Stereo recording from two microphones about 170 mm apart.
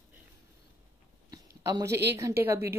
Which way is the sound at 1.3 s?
20° right (ahead or behind).